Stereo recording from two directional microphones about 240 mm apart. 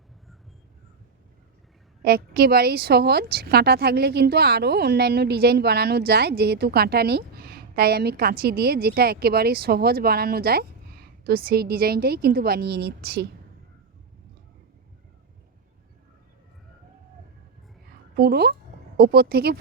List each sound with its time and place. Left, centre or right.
2.0 s speech: right
18.2 s speech: right